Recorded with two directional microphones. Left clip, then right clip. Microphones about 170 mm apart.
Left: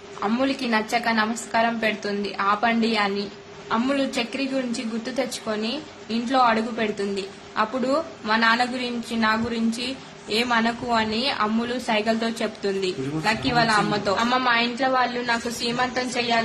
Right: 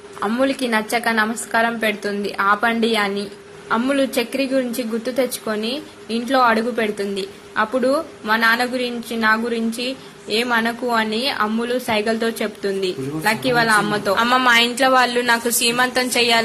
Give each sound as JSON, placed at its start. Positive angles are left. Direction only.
{"t": 0.2, "sound": "a woman's voice", "side_deg": -15}